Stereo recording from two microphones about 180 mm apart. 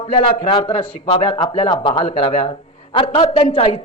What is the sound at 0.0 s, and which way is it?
Speech, 30° left (ahead or behind).